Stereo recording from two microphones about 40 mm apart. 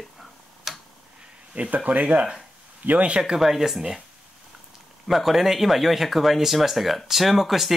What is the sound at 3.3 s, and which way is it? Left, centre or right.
Speech, centre.